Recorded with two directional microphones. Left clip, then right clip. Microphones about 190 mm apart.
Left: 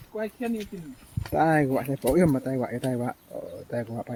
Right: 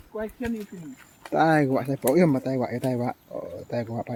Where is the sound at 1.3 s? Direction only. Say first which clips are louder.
Right 2 dB; 15° right (ahead or behind).